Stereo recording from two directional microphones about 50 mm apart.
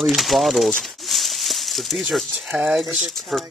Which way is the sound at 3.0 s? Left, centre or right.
Centre.